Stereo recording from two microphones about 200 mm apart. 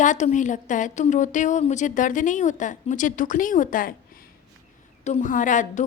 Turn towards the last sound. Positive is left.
turn(degrees=40)  # may be behind; listen again after turning